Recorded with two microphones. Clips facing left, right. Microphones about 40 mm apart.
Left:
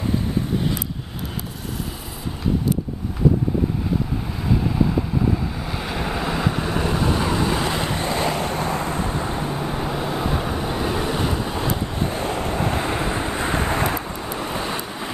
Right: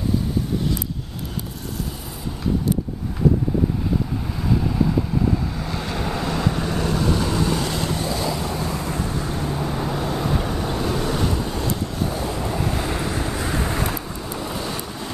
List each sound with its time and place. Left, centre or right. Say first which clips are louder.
4.5 s vehicle: even; centre